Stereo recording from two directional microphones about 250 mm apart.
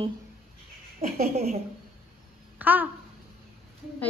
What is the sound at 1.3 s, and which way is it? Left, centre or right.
Speech, right.